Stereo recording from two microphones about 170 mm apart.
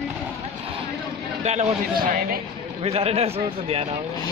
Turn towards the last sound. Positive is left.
turn(degrees=-35)  # may be behind; listen again after turning